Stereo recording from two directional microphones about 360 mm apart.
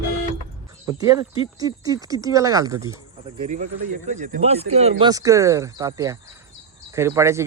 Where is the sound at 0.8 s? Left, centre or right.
Centre.